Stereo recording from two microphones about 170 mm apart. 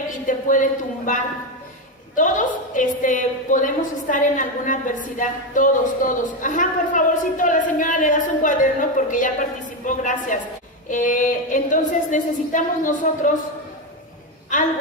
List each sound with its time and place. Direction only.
0.3 s a woman's voice: 50° left (ahead or behind)